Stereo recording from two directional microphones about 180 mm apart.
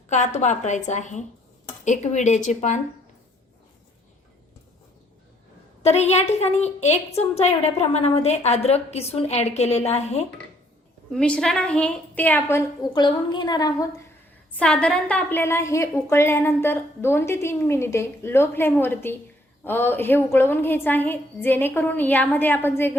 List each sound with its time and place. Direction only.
0.1 s a woman's voice: 40° left (ahead or behind)
5.8 s a woman's voice: 35° left (ahead or behind)
11.1 s a woman's voice: 5° left (ahead or behind)
12.9 s a woman's voice: 25° left (ahead or behind)
14.5 s a woman's voice: 5° left (ahead or behind)